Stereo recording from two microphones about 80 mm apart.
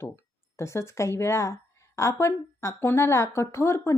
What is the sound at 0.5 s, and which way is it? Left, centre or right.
Speech, left.